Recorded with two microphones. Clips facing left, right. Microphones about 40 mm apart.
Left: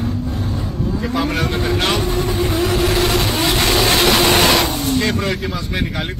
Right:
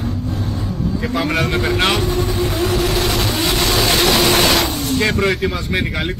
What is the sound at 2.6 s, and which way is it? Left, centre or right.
Vehicle, left.